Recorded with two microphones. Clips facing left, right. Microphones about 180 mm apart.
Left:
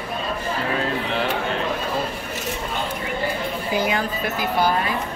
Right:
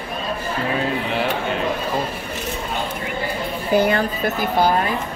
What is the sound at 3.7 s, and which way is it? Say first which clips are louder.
Speech: right 6 dB; 60° right (ahead or behind).